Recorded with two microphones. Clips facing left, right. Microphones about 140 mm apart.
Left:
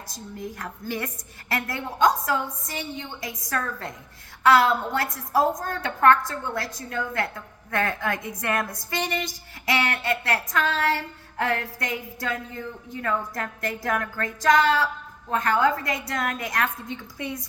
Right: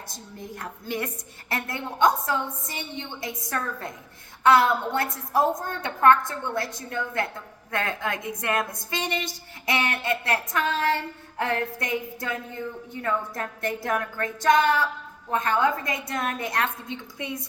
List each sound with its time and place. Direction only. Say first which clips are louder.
0.3 s a woman's voice: left 2 dB; 25° right (ahead or behind)
4.9 s a woman's voice: left 1 dB; 25° right (ahead or behind)